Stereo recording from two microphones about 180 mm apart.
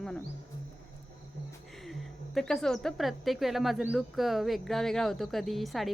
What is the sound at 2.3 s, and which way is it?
Speech, centre (ahead or behind).